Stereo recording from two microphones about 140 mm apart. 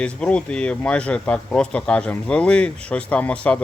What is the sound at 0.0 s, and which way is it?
Speech, 10° left (ahead or behind).